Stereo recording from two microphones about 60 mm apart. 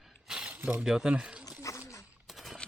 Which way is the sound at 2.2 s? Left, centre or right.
Centre.